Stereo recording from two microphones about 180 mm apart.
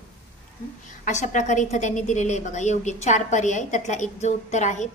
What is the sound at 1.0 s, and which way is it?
A woman's voice, 45° left (ahead or behind).